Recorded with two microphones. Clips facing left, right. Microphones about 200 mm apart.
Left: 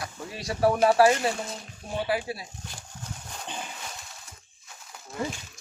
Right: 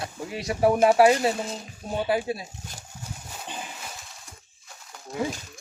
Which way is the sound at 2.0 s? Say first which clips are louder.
Right 4 dB; 25° right (ahead or behind).